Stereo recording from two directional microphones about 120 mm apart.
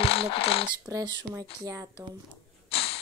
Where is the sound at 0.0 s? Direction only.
55° left (ahead or behind).